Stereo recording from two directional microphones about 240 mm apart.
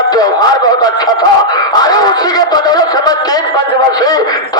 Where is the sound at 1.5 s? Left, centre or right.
Centre.